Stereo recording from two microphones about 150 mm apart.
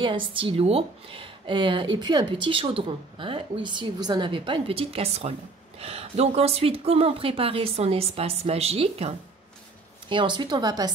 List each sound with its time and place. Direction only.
0.0 s speech: 35° right (ahead or behind)